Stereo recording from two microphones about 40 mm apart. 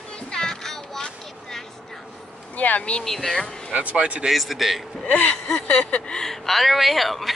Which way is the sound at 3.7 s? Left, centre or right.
Right.